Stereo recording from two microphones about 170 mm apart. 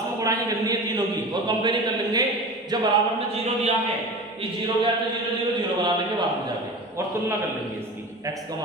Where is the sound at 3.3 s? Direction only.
40° right (ahead or behind).